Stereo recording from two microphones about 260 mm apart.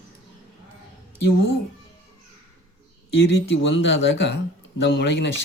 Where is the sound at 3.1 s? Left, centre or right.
Left.